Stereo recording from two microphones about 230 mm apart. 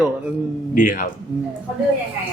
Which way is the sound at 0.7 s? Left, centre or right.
Left.